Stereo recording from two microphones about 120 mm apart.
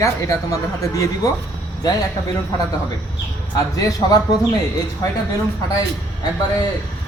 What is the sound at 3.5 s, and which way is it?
Speech, 30° left (ahead or behind).